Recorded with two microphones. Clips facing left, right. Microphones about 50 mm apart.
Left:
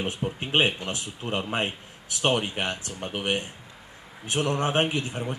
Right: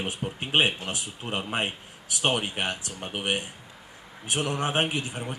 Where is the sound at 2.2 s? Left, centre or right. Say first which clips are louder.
Left 2 dB; centre.